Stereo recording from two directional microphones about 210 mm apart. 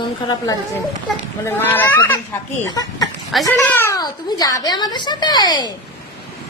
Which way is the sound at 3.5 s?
15° left (ahead or behind).